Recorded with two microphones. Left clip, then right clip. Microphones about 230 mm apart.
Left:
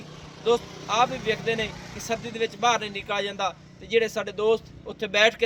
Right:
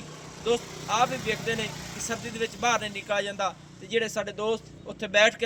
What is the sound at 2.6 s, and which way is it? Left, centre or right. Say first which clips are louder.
A man's voice: left 3 dB; left.